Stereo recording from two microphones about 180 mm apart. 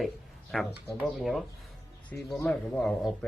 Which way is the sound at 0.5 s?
Centre (ahead or behind).